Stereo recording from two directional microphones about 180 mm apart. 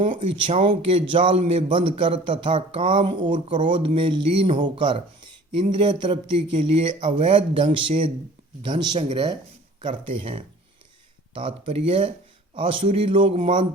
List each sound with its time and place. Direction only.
0.2 s a man's voice: 30° right (ahead or behind)
11.3 s a man's voice: 30° right (ahead or behind)